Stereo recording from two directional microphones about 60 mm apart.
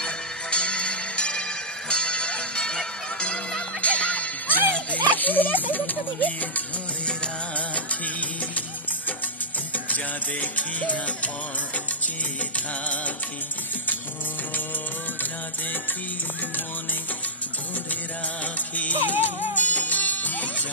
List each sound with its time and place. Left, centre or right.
0.0 s music: centre
4.9 s speech: left
7.5 s music: left
9.8 s music: left
12.5 s music: left
18.8 s music: left